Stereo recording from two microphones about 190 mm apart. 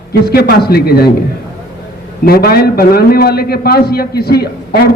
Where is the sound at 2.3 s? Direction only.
55° left (ahead or behind).